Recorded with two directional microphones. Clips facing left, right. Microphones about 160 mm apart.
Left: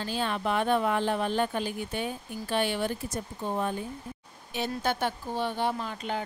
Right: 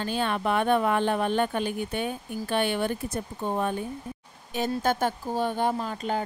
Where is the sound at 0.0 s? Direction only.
55° right (ahead or behind).